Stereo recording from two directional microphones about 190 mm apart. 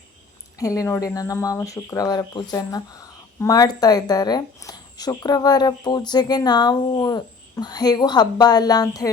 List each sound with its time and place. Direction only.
0.6 s speech: 15° left (ahead or behind)